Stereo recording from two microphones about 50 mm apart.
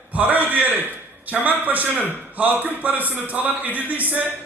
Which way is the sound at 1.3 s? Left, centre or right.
Right.